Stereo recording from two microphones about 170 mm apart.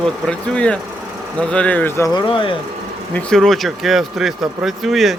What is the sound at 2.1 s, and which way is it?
Speech, 30° left (ahead or behind).